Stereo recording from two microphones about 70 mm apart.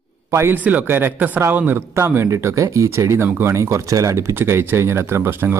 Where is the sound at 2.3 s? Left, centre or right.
Right.